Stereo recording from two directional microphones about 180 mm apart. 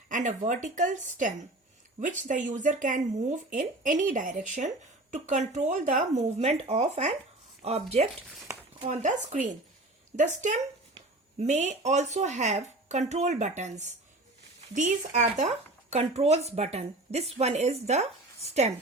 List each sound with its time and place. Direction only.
0.1 s speech: 45° right (ahead or behind)